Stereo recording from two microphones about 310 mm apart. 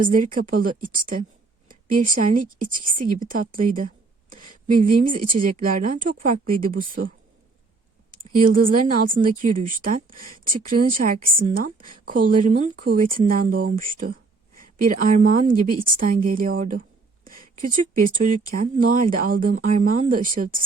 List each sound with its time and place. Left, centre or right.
0.0 s speech: right
8.2 s speech: right